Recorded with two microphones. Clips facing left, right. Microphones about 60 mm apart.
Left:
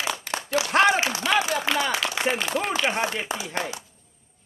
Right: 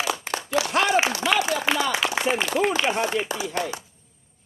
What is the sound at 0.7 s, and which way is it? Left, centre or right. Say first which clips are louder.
Speech: left 3 dB; left.